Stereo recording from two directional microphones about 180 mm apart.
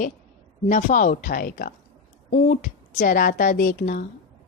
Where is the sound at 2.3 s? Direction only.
45° left (ahead or behind).